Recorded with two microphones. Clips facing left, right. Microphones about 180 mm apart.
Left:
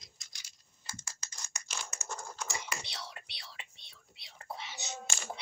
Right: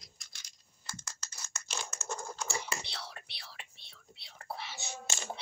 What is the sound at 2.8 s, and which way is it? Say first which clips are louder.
Whispering: even; 20° left (ahead or behind).